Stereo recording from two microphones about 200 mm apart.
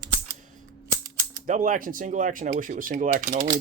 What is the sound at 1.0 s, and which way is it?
Speech, 40° right (ahead or behind).